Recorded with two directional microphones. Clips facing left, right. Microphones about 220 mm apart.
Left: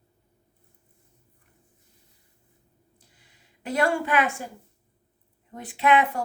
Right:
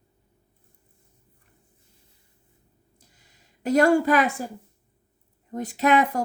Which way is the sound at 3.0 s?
40° right (ahead or behind).